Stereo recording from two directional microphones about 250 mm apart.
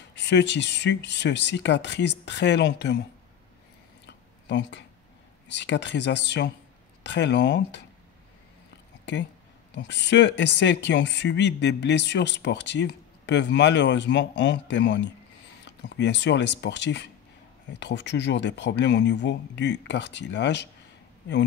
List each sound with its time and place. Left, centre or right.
0.1 s speech: left
4.0 s a sound: left
5.5 s speech: left
9.8 s speech: left